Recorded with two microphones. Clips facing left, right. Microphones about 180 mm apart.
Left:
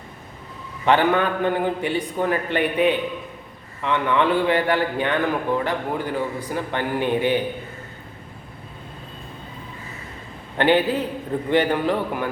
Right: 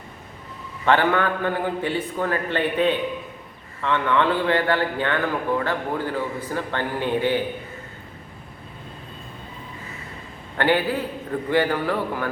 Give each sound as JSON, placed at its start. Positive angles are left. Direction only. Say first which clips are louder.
{"t": 0.9, "sound": "a man's voice", "louder": "left 1 dB", "side_deg": 15}
{"t": 10.6, "sound": "a man's voice", "louder": "left 3 dB", "side_deg": 20}